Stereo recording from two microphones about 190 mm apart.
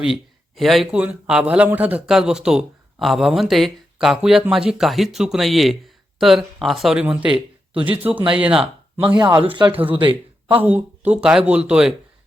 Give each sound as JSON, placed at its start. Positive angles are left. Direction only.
{"t": 0.0, "sound": "speech", "side_deg": 0}
{"t": 7.3, "sound": "speech", "side_deg": -25}
{"t": 8.3, "sound": "speech", "side_deg": -5}
{"t": 9.1, "sound": "speech", "side_deg": -25}
{"t": 10.6, "sound": "speech", "side_deg": -10}